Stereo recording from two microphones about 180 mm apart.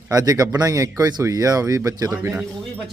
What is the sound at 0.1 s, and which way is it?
Speech, 20° right (ahead or behind).